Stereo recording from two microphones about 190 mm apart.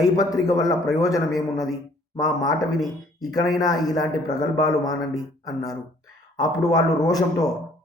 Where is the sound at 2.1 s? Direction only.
20° left (ahead or behind).